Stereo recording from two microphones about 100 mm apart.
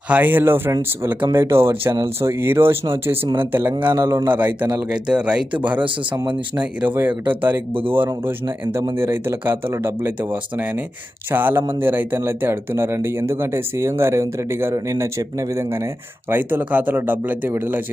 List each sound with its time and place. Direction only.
0.1 s speech: 20° right (ahead or behind)
4.3 s speech: 20° right (ahead or behind)
6.6 s speech: 20° right (ahead or behind)
7.7 s speech: 65° right (ahead or behind)
7.9 s speech: 20° right (ahead or behind)